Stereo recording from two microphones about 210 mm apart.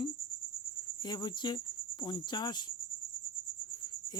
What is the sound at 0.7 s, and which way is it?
Cricket, 20° left (ahead or behind).